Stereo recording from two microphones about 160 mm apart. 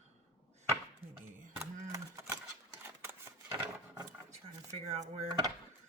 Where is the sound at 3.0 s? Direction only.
15° right (ahead or behind).